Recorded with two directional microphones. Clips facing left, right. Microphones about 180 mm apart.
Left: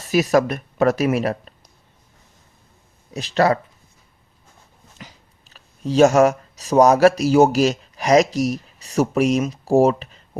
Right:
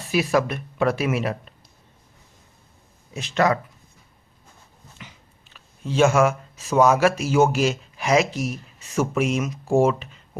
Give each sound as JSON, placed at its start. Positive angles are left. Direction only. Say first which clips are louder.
{"t": 0.1, "sound": "speech", "louder": "left 4 dB", "side_deg": 40}
{"t": 3.1, "sound": "speech", "louder": "left 3 dB", "side_deg": 35}
{"t": 4.9, "sound": "speech", "louder": "left 3 dB", "side_deg": 40}